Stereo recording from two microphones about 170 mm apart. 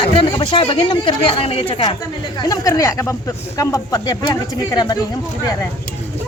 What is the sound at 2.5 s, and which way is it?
Speech, 20° left (ahead or behind).